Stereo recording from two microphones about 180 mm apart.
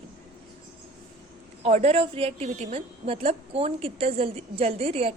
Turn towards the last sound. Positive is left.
turn(degrees=-35)  # may be behind; listen again after turning